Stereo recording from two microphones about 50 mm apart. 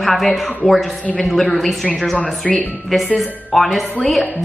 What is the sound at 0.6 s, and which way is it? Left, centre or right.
Speech, centre.